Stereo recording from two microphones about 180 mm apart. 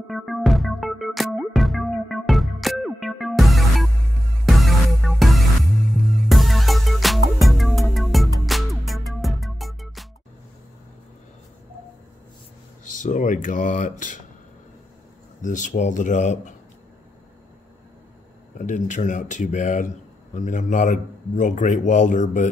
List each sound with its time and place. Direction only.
0.1 s music: centre (ahead or behind)
12.9 s a sound: 45° left (ahead or behind)
15.4 s a man's voice: 45° left (ahead or behind)
18.6 s a man's voice: 45° left (ahead or behind)